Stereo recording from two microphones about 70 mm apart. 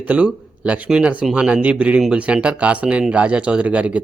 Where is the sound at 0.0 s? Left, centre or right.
Centre.